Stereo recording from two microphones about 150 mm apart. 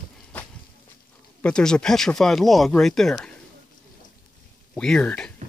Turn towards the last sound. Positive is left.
turn(degrees=5)  # may be behind; listen again after turning